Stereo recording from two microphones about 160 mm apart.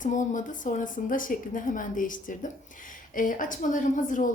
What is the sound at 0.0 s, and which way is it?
A woman's voice, 50° left (ahead or behind).